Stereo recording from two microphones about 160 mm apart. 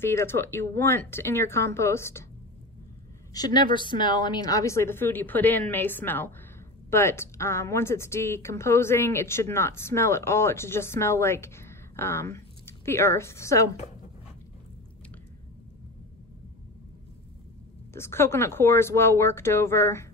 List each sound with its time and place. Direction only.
0.0 s a woman's voice: 15° left (ahead or behind)
3.3 s a woman's voice: 25° left (ahead or behind)
17.9 s a woman's voice: 15° left (ahead or behind)